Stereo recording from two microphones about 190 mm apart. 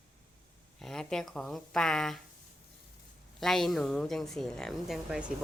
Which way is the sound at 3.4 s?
Centre (ahead or behind).